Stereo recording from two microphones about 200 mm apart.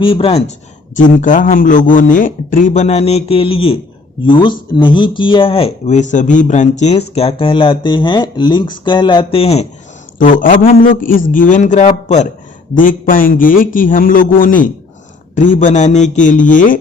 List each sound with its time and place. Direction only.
0.0 s speech: 25° left (ahead or behind)
0.9 s a man's voice: 40° left (ahead or behind)
10.2 s a man's voice: 40° left (ahead or behind)